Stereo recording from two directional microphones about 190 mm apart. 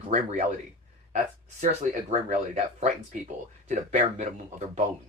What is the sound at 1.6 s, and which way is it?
Speech, 40° right (ahead or behind).